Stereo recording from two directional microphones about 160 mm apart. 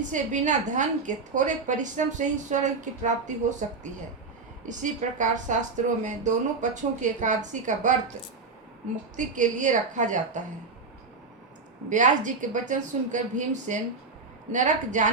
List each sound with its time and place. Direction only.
0.1 s a woman's voice: 50° right (ahead or behind)
9.1 s a woman's voice: 55° right (ahead or behind)
11.9 s a woman's voice: 50° right (ahead or behind)